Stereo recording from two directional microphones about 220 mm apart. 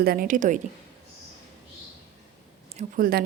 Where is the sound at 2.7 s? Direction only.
35° right (ahead or behind).